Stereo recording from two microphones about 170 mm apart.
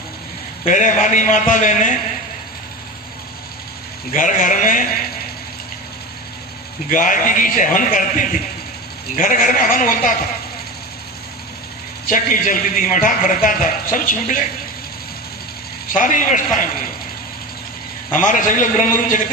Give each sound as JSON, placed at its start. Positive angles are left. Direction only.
{"t": 0.7, "sound": "a man's voice", "side_deg": 50}
{"t": 4.1, "sound": "a man's voice", "side_deg": 50}
{"t": 6.9, "sound": "a man's voice", "side_deg": 50}
{"t": 12.1, "sound": "a man's voice", "side_deg": 50}
{"t": 15.9, "sound": "a man's voice", "side_deg": 50}
{"t": 18.1, "sound": "a man's voice", "side_deg": 50}